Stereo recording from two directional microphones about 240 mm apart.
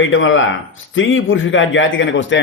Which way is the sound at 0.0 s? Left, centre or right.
Left.